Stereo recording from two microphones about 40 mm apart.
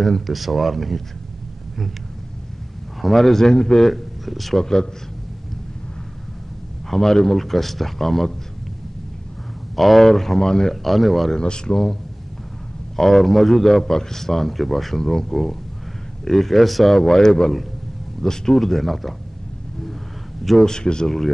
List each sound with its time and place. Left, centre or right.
0.0 s a man's voice: centre
3.0 s speech: centre
3.9 s speech: centre
6.9 s a man's voice: centre
9.8 s speech: centre
10.7 s a man's voice: centre
11.3 s a man's voice: left; by 19.1 s centre
20.4 s a man's voice: centre
20.7 s speech: centre